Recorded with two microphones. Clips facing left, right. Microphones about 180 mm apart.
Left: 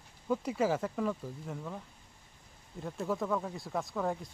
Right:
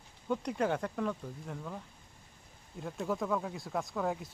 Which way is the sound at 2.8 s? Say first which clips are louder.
Even; centre (ahead or behind).